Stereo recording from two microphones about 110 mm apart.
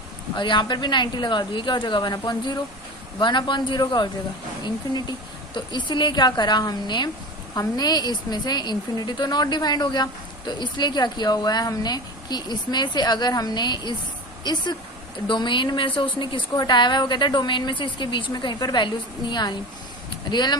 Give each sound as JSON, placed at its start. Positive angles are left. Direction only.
{"t": 0.3, "sound": "a woman's voice", "side_deg": 45}